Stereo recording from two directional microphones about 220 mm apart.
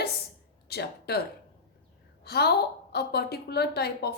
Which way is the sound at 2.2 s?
45° left (ahead or behind).